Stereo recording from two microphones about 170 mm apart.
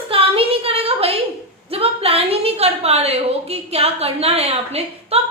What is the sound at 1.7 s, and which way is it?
A woman's voice, 35° right (ahead or behind).